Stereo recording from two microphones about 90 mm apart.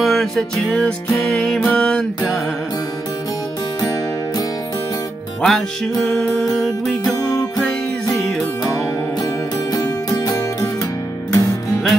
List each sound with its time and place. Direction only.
0.0 s music: centre (ahead or behind)
5.4 s music: 5° left (ahead or behind)
7.2 s music: 45° left (ahead or behind)
9.7 s music: 40° left (ahead or behind)